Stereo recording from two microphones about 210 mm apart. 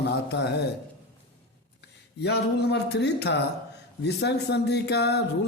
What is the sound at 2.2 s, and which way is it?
Speech, 50° left (ahead or behind).